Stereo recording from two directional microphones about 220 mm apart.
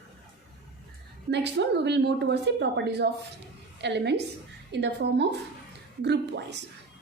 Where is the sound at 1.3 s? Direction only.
50° right (ahead or behind).